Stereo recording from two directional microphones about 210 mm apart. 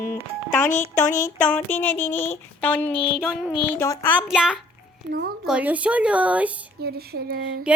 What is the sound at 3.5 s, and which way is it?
Child singing, 10° left (ahead or behind).